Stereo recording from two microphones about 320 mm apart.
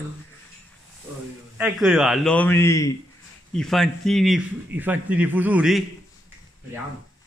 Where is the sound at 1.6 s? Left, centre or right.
Centre.